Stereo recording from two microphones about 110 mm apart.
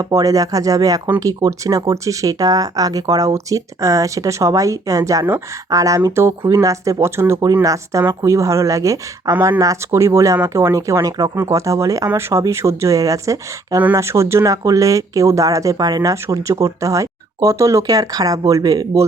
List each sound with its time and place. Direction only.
0.0 s speech: 30° right (ahead or behind)